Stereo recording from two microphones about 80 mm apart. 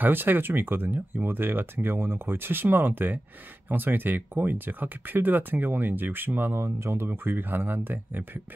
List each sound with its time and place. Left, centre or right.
0.0 s speech: right